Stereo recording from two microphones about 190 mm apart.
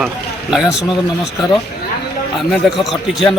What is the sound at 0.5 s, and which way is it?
A man's voice, 5° right (ahead or behind).